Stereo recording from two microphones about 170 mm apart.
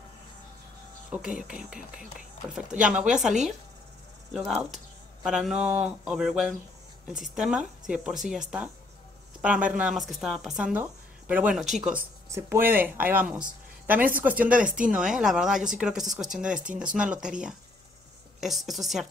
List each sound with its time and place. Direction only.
1.1 s speech: 5° right (ahead or behind)
9.7 s speech: 5° right (ahead or behind)
12.3 s speech: 15° right (ahead or behind)